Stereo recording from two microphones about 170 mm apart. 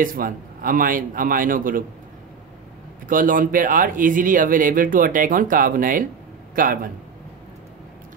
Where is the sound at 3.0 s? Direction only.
55° right (ahead or behind).